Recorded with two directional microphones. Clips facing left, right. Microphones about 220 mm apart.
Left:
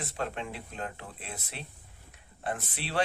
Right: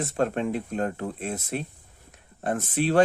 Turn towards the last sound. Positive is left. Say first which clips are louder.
# right 11 dB
turn(degrees=-45)  # may be behind; listen again after turning